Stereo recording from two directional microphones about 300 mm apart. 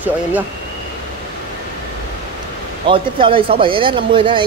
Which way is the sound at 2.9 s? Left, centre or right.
Centre.